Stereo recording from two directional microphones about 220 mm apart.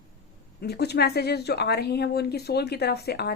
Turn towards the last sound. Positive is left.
turn(degrees=45)  # may be behind; listen again after turning